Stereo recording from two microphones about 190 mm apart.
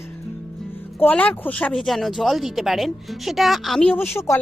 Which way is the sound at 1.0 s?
10° left (ahead or behind).